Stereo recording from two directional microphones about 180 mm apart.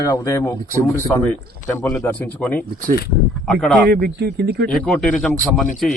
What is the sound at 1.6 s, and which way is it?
A man's voice, 10° left (ahead or behind).